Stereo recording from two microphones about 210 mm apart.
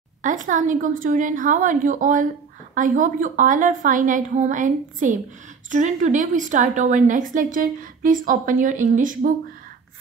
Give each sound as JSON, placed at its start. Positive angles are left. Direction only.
{"t": 0.2, "sound": "a woman's voice", "side_deg": -35}